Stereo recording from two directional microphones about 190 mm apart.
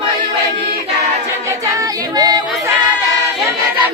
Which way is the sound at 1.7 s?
20° right (ahead or behind).